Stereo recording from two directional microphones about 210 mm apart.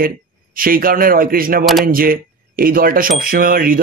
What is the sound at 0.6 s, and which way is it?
Speech, 45° right (ahead or behind).